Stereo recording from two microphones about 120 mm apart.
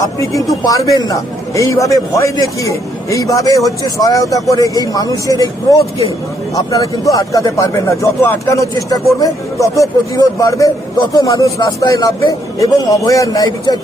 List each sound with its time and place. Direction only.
0.0 s a man's voice: 25° left (ahead or behind)